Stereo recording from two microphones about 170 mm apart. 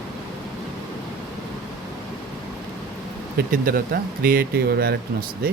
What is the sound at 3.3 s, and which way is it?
Speech, 55° right (ahead or behind).